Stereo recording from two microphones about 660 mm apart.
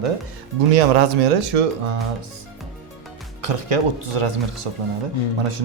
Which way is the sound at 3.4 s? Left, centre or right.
Right.